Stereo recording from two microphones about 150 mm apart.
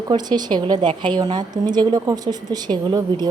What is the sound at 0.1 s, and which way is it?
A woman's voice, 30° right (ahead or behind).